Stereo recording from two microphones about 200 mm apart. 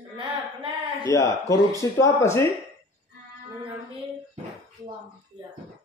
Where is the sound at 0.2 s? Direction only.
25° right (ahead or behind).